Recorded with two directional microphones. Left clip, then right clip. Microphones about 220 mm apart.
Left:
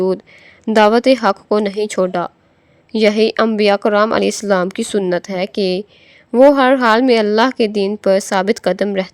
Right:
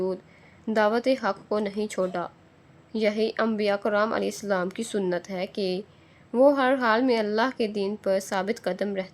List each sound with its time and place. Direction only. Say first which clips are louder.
0.6 s speech: left 12 dB; 40° left (ahead or behind)